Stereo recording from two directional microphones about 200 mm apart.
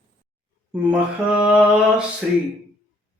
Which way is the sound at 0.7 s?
5° right (ahead or behind).